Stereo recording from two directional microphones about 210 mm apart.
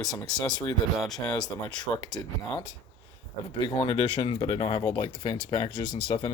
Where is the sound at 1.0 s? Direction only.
Centre (ahead or behind).